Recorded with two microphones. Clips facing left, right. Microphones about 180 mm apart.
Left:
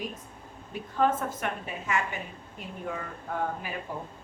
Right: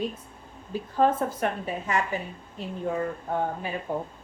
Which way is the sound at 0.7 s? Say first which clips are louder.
Right 3 dB; 35° right (ahead or behind).